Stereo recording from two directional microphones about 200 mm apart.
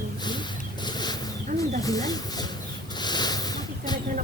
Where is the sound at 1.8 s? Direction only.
20° left (ahead or behind).